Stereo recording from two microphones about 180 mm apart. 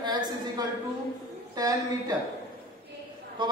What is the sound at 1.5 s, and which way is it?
Speech, 20° right (ahead or behind).